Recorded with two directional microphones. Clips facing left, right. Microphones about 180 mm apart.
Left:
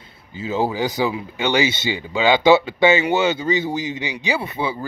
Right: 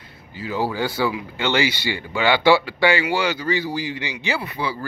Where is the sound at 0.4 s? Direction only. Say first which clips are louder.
Left 2 dB; 25° left (ahead or behind).